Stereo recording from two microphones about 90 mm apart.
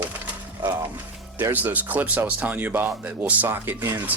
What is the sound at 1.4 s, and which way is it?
Speech, 25° right (ahead or behind).